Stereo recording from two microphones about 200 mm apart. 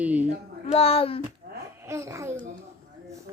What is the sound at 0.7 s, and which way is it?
Speech, 30° left (ahead or behind).